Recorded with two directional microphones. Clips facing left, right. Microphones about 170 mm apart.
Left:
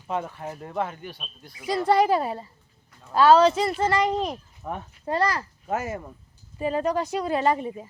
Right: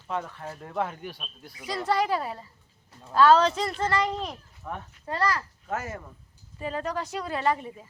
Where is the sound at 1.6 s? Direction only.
10° left (ahead or behind).